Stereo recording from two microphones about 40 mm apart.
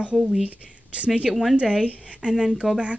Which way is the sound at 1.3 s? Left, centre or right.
Centre.